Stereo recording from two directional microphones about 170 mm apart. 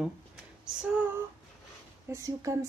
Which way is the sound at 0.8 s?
10° right (ahead or behind).